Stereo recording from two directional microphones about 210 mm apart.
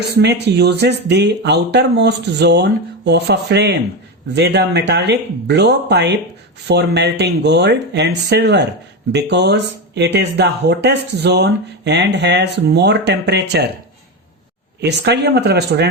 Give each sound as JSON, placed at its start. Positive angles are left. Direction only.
{"t": 0.2, "sound": "speech", "side_deg": -55}
{"t": 14.8, "sound": "speech", "side_deg": -55}